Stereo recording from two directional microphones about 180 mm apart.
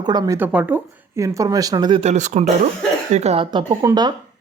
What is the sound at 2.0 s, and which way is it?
Speech, 40° right (ahead or behind).